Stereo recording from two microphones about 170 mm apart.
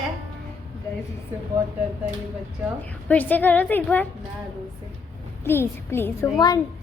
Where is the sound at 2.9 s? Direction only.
10° left (ahead or behind).